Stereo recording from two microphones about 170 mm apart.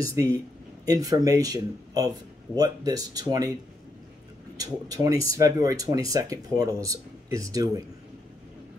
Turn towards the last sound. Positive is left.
turn(degrees=-20)  # may be behind; listen again after turning